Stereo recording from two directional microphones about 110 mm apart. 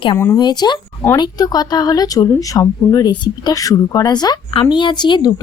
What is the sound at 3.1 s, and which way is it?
Speech, 45° left (ahead or behind).